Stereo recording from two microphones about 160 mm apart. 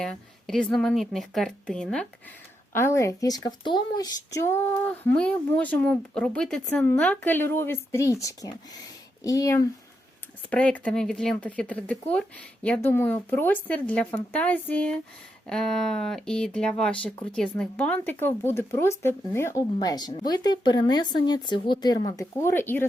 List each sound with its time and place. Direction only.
0.0 s a woman's voice: 5° left (ahead or behind)
2.7 s speech: 15° left (ahead or behind)
10.5 s a woman's voice: 10° left (ahead or behind)